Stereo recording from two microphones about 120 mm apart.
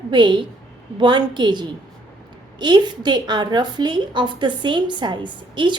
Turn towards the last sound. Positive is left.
turn(degrees=-40)  # may be behind; listen again after turning